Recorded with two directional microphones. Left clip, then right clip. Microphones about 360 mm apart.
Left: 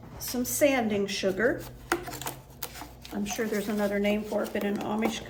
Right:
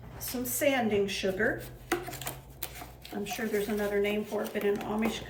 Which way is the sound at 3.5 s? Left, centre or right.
Centre.